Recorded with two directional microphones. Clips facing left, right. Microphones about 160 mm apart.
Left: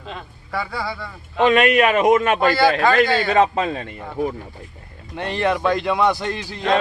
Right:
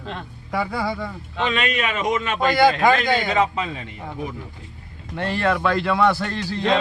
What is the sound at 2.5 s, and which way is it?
Speech, 15° right (ahead or behind).